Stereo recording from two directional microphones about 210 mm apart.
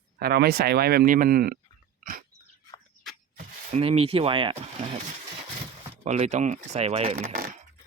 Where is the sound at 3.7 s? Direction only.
25° right (ahead or behind).